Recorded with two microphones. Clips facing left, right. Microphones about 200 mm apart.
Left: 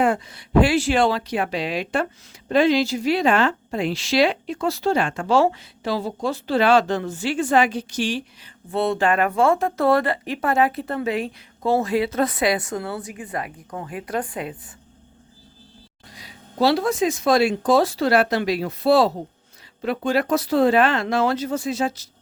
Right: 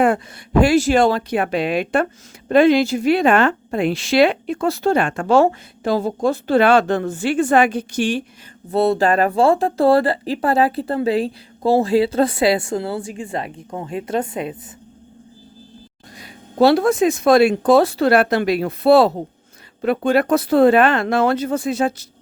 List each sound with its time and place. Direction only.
0.0 s a woman's voice: 50° right (ahead or behind)
8.7 s speech: 35° right (ahead or behind)
16.1 s speech: 55° right (ahead or behind)